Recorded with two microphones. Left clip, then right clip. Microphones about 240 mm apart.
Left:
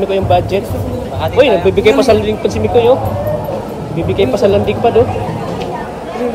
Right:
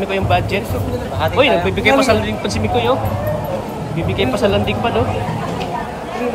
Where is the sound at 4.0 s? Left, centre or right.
Centre.